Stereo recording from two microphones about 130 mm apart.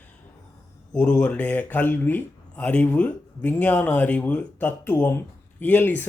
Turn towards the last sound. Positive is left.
turn(degrees=15)  # may be behind; listen again after turning